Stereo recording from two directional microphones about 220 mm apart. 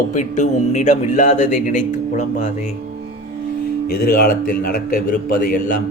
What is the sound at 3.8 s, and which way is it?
A man's voice, 40° left (ahead or behind).